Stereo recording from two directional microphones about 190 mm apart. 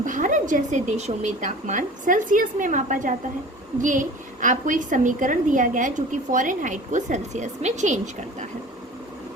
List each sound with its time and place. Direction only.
0.0 s a woman's voice: 40° right (ahead or behind)